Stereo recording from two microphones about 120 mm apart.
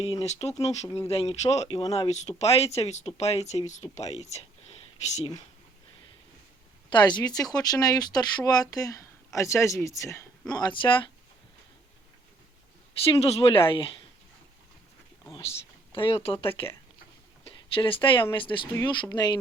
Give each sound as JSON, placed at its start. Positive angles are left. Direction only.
{"t": 0.0, "sound": "speech", "side_deg": 60}
{"t": 3.7, "sound": "speech", "side_deg": 75}
{"t": 6.9, "sound": "speech", "side_deg": 35}
{"t": 10.5, "sound": "speech", "side_deg": 40}
{"t": 13.1, "sound": "speech", "side_deg": 50}
{"t": 15.4, "sound": "a sound", "side_deg": 50}
{"t": 16.2, "sound": "speech", "side_deg": 45}